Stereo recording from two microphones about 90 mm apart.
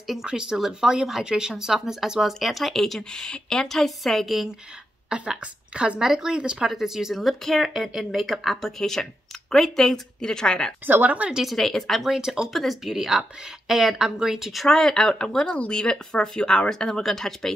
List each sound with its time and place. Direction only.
0.0 s speech: 5° right (ahead or behind)
10.9 s speech: 20° right (ahead or behind)
11.4 s speech: centre (ahead or behind)